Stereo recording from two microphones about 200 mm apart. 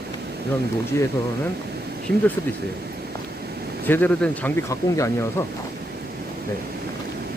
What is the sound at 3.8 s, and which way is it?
Speech, 10° left (ahead or behind).